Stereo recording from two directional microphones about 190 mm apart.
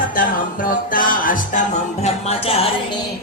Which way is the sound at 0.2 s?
45° left (ahead or behind).